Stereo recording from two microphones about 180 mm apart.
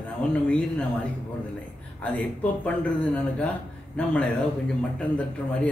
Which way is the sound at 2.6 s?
5° left (ahead or behind).